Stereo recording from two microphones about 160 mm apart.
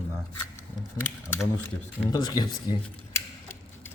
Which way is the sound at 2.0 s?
25° left (ahead or behind).